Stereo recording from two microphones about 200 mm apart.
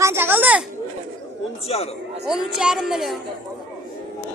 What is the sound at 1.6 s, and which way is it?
Speech, 30° left (ahead or behind).